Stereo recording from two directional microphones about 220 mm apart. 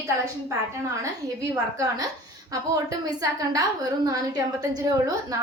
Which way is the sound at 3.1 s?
15° right (ahead or behind).